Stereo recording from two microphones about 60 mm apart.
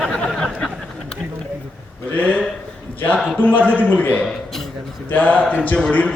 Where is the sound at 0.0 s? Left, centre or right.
Centre.